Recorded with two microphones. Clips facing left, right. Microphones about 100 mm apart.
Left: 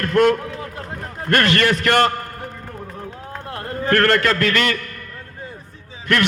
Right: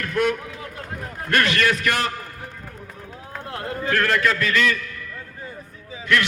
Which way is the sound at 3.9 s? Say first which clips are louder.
Left 5 dB; 70° left (ahead or behind).